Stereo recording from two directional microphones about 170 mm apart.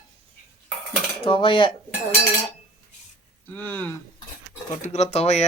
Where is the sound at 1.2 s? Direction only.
30° left (ahead or behind).